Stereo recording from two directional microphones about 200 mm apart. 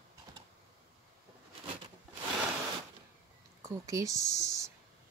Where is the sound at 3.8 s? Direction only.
15° right (ahead or behind).